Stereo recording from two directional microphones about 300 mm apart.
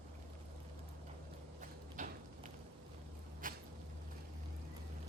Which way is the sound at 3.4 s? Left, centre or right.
Right.